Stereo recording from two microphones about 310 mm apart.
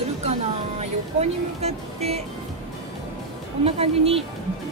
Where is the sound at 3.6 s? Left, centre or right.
Centre.